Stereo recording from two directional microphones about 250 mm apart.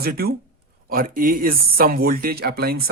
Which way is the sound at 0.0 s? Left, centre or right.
Right.